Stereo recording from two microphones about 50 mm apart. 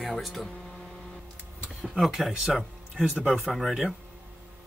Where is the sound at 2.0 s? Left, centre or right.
Centre.